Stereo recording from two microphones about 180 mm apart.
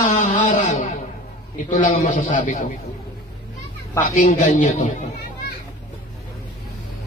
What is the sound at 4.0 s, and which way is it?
Speech, 45° left (ahead or behind).